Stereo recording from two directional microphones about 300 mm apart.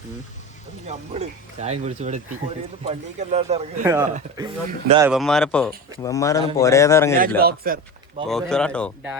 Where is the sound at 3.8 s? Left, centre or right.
Centre.